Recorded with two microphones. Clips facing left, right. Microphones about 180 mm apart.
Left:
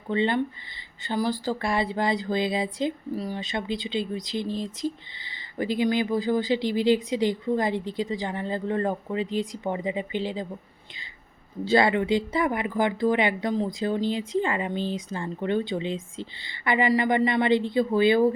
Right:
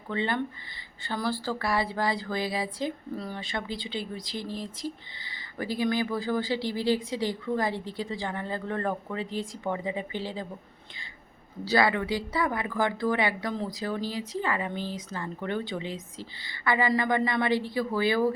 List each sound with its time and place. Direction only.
0.1 s speech: 20° left (ahead or behind)
11.6 s speech: 25° left (ahead or behind)